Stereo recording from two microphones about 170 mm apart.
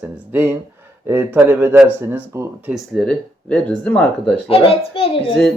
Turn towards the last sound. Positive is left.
turn(degrees=30)  # may be behind; listen again after turning